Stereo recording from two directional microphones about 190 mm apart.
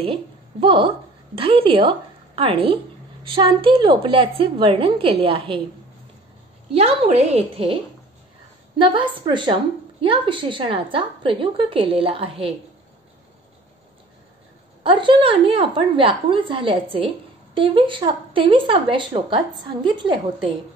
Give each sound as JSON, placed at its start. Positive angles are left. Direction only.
{"t": 0.0, "sound": "a woman's voice", "side_deg": -30}
{"t": 6.7, "sound": "a woman's voice", "side_deg": -30}
{"t": 14.8, "sound": "speech", "side_deg": -25}